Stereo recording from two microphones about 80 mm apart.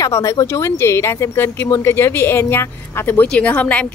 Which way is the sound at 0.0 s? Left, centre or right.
Left.